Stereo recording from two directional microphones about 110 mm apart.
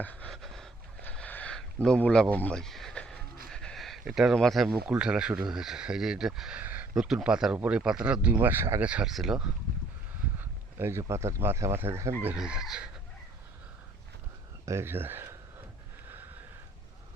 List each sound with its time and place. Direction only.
0.0 s a sound: 15° left (ahead or behind)
0.3 s a sound: 5° left (ahead or behind)
2.0 s speech: 10° left (ahead or behind)
6.6 s speech: 15° right (ahead or behind)
8.8 s speech: 10° right (ahead or behind)
10.8 s speech: 25° right (ahead or behind)
12.4 s speech: 5° right (ahead or behind)
14.6 s speech: 25° right (ahead or behind)